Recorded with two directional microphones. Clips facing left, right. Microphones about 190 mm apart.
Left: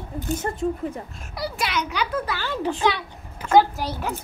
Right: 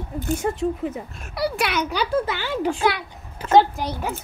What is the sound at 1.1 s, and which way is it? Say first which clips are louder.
Speech: right 5 dB; 65° right (ahead or behind).